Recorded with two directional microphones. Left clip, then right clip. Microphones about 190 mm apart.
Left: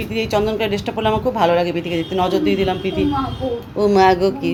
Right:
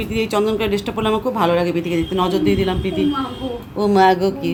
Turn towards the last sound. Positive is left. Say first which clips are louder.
# left 1 dB
turn(degrees=0)  # may be behind; listen again after turning